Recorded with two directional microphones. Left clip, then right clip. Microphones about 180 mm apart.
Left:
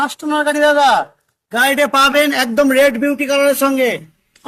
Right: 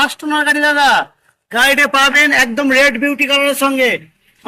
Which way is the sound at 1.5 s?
45° left (ahead or behind).